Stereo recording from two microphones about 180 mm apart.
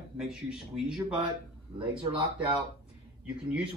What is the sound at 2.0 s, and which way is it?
Speech, 30° right (ahead or behind).